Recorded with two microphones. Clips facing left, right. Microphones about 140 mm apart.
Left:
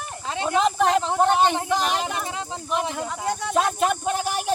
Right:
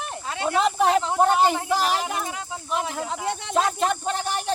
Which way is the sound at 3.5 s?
5° left (ahead or behind).